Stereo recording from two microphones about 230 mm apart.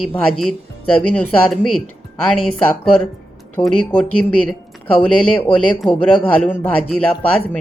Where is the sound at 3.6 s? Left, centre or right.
Left.